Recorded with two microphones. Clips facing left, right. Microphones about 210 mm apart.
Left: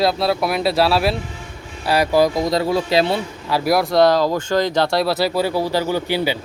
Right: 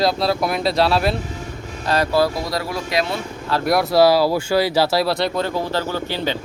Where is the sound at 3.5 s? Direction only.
Centre (ahead or behind).